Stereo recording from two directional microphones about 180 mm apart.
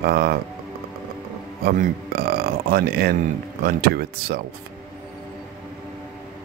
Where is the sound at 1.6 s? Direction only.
55° right (ahead or behind).